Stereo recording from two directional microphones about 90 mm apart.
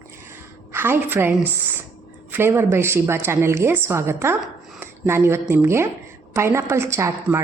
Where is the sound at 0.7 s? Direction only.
25° right (ahead or behind).